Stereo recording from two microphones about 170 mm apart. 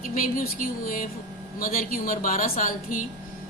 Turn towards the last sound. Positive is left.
turn(degrees=55)  # may be behind; listen again after turning